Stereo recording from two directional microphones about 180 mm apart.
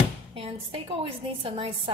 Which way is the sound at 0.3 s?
35° right (ahead or behind).